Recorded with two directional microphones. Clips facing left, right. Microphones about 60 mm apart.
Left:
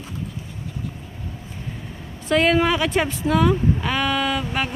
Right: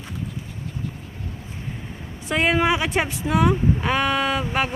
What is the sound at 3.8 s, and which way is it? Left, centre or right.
Speech, right.